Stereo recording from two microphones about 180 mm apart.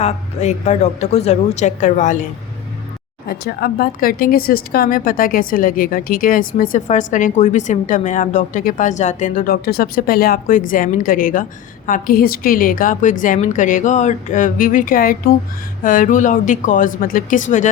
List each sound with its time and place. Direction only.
0.0 s a woman's voice: 35° left (ahead or behind)
3.2 s a woman's voice: 55° left (ahead or behind)